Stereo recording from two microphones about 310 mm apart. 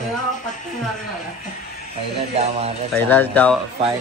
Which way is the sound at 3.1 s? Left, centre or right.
Centre.